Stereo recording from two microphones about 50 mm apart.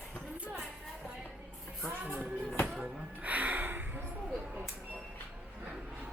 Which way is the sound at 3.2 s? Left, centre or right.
Right.